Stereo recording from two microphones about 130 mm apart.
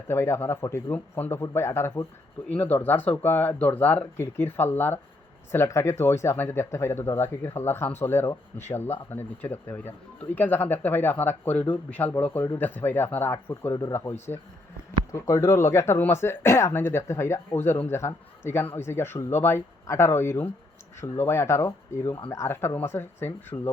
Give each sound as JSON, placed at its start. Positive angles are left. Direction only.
{"t": 0.1, "sound": "speech", "side_deg": 20}